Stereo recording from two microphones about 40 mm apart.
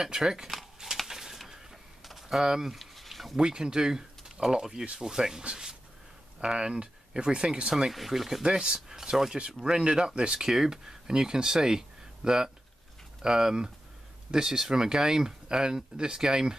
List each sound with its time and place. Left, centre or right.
0.0 s speech: centre
1.0 s bird: centre
2.0 s typing: centre
2.4 s speech: centre
2.7 s a sound: centre
3.3 s speech: centre
6.4 s speech: centre
7.9 s speech: centre
8.4 s speech: right